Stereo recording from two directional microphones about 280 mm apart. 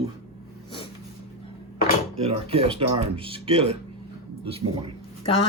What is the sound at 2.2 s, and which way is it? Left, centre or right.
Speech, right.